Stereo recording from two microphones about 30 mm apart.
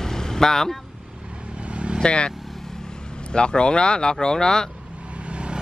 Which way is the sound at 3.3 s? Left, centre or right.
Left.